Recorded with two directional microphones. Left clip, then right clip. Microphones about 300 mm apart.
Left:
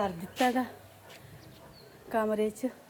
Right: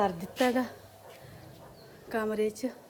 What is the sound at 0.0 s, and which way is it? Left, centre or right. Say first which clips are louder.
Speech: right 1 dB; centre.